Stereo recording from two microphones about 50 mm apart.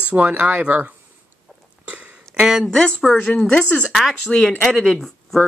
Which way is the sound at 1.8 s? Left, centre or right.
Right.